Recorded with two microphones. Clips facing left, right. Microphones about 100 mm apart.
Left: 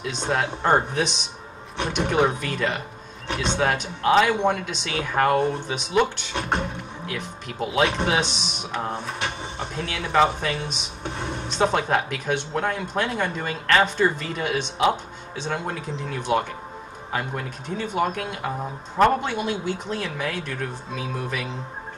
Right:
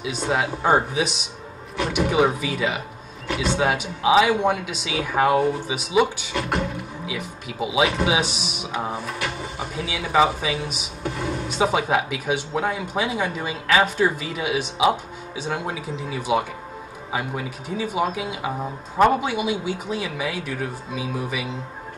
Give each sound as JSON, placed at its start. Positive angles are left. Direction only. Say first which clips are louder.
{"t": 0.6, "sound": "speech", "louder": "right 1 dB", "side_deg": -5}
{"t": 6.3, "sound": "beatboxing", "louder": "even", "side_deg": 25}
{"t": 7.1, "sound": "speech", "louder": "left 1 dB", "side_deg": -5}
{"t": 11.1, "sound": "a sound", "louder": "right 4 dB", "side_deg": 25}
{"t": 11.5, "sound": "speech", "louder": "even", "side_deg": -5}